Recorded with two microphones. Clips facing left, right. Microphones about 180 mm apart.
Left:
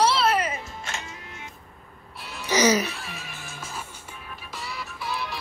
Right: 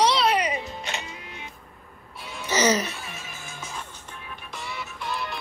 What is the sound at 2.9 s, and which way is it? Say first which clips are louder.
Music: left 1 dB; centre (ahead or behind).